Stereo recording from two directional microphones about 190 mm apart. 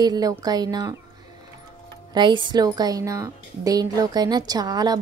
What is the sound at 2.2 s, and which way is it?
A woman's voice, 25° right (ahead or behind).